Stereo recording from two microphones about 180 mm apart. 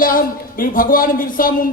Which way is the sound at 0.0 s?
50° left (ahead or behind).